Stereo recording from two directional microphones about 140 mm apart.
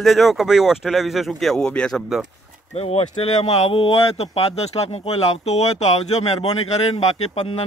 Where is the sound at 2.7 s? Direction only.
45° left (ahead or behind).